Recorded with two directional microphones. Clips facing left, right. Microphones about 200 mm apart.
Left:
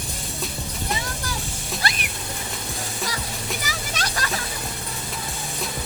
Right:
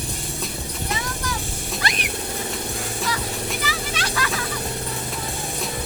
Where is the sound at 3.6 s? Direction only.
40° left (ahead or behind).